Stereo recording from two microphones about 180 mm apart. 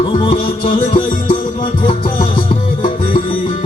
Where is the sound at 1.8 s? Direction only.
30° left (ahead or behind).